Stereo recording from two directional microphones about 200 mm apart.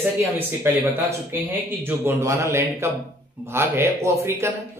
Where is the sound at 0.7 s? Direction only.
10° right (ahead or behind).